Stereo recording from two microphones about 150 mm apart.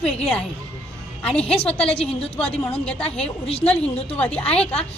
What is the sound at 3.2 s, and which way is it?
Speech, 40° left (ahead or behind).